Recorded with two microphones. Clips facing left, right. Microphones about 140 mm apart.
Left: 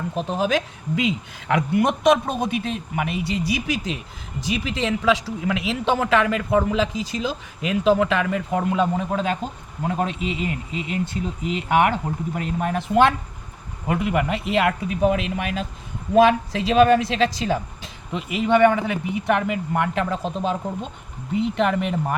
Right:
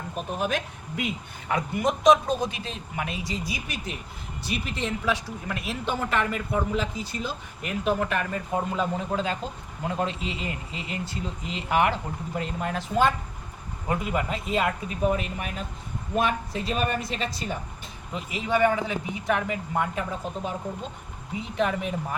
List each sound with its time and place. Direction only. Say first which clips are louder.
0.2 s speech: left 6 dB; 90° left
18.1 s speech: left 7 dB; 70° left (ahead or behind); by 20.6 s 90° left
21.5 s speech: left 1 dB; 70° left (ahead or behind)